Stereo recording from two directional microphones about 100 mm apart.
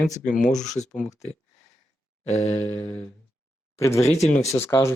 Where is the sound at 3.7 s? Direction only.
30° left (ahead or behind).